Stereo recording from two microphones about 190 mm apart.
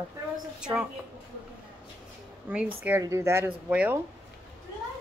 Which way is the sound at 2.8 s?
15° right (ahead or behind).